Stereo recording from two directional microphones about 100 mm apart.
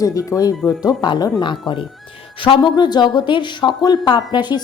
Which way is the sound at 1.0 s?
50° left (ahead or behind).